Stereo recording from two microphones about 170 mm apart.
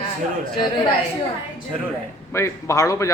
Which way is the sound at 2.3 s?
15° left (ahead or behind).